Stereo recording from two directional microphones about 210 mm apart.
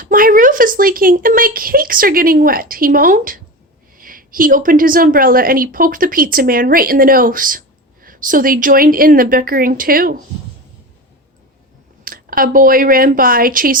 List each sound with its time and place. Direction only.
0.0 s a woman's voice: 40° right (ahead or behind)
12.0 s speech: 45° right (ahead or behind)